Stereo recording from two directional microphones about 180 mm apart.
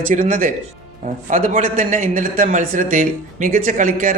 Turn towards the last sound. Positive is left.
turn(degrees=-45)  # may be behind; listen again after turning